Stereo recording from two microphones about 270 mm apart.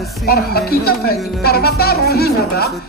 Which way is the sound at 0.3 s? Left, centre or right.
Left.